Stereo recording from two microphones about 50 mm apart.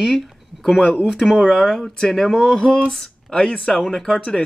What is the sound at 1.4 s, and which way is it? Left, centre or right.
Speech, centre.